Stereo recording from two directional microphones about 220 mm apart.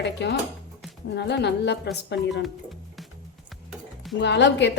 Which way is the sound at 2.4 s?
Centre (ahead or behind).